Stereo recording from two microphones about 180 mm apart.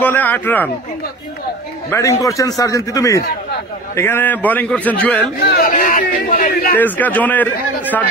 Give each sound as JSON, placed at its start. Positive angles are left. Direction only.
{"t": 0.0, "sound": "a man's voice", "side_deg": 10}
{"t": 1.9, "sound": "a man's voice", "side_deg": 15}
{"t": 5.2, "sound": "speech", "side_deg": 65}
{"t": 5.7, "sound": "speech", "side_deg": 45}
{"t": 6.8, "sound": "a man's voice", "side_deg": 10}